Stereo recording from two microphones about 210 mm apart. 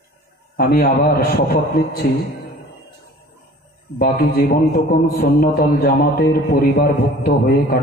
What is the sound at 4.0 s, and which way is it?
A man's voice, 45° left (ahead or behind).